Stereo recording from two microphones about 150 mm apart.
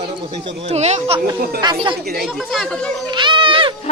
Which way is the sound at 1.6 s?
30° right (ahead or behind).